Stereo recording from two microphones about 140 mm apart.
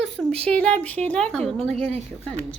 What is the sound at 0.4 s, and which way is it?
A woman's voice, 10° left (ahead or behind).